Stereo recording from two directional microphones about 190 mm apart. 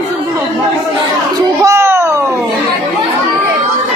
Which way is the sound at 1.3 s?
15° right (ahead or behind).